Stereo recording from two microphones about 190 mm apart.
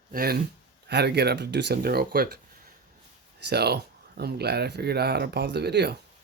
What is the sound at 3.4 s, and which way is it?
Speech, 60° right (ahead or behind).